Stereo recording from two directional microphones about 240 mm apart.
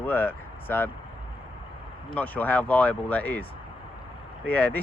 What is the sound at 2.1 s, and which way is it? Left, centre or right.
Speech, centre.